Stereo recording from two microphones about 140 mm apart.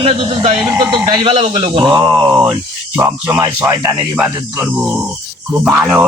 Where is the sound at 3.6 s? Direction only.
25° right (ahead or behind).